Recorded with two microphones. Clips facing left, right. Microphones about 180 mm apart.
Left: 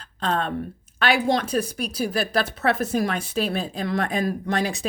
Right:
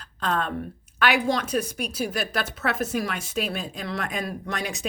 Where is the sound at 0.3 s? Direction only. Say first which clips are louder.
Left 2 dB; 30° left (ahead or behind).